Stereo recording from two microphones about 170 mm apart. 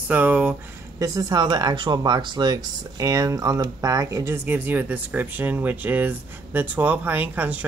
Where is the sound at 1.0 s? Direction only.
20° right (ahead or behind).